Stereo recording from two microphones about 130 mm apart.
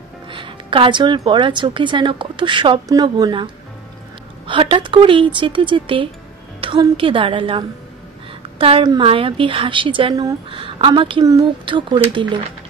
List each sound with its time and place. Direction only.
0.3 s a sound: 40° right (ahead or behind)
1.2 s a woman's voice: 40° right (ahead or behind)
6.6 s music: 45° right (ahead or behind)
7.0 s a woman's voice: 40° right (ahead or behind)